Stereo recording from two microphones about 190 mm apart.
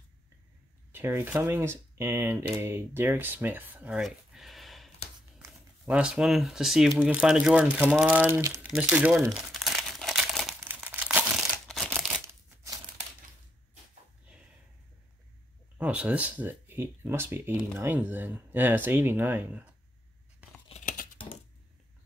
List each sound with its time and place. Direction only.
0.9 s speech: 10° right (ahead or behind)
8.6 s crumpling: 5° right (ahead or behind)
11.9 s a sound: 10° right (ahead or behind)
15.8 s speech: 5° right (ahead or behind)
20.8 s typing: 45° left (ahead or behind)